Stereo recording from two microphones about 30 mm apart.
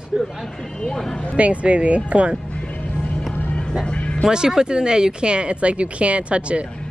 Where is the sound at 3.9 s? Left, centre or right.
Left.